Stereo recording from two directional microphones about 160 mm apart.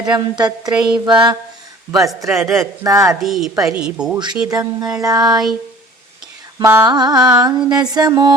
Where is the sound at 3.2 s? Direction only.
Centre (ahead or behind).